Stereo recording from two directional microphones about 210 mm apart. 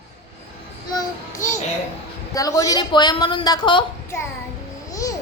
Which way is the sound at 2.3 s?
15° left (ahead or behind).